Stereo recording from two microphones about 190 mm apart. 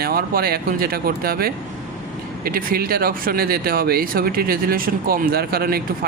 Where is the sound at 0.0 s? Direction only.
50° right (ahead or behind).